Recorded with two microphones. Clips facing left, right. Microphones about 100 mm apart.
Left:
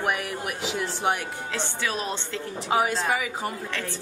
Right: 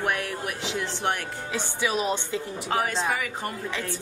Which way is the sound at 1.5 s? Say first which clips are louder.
Right 3 dB; 15° right (ahead or behind).